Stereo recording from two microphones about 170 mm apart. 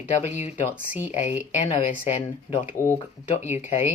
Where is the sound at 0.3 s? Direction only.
40° left (ahead or behind).